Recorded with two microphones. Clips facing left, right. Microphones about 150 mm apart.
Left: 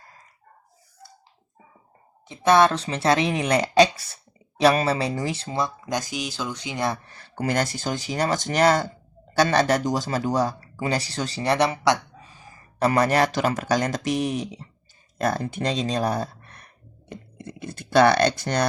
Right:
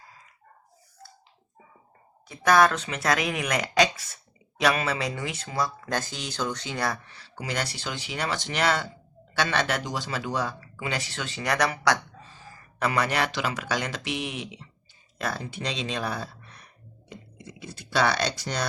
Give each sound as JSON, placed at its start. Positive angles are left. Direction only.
{"t": 2.2, "sound": "speech", "side_deg": 25}
{"t": 7.0, "sound": "speech", "side_deg": 45}
{"t": 12.8, "sound": "speech", "side_deg": 40}
{"t": 15.2, "sound": "a sound", "side_deg": 50}